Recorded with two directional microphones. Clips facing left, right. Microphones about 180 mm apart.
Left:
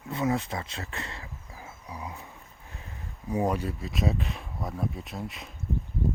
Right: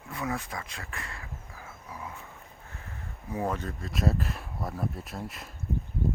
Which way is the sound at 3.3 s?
15° left (ahead or behind).